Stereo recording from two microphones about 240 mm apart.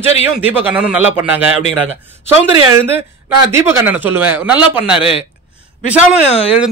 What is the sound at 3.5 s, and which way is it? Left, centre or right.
A man's voice, centre.